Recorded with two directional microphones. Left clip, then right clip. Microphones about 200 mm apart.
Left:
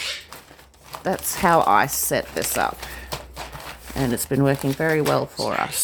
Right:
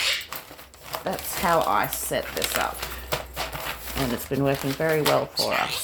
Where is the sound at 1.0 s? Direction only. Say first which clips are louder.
Left 5 dB; 35° left (ahead or behind).